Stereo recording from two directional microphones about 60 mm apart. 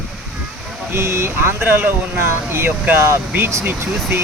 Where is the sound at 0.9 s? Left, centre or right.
Right.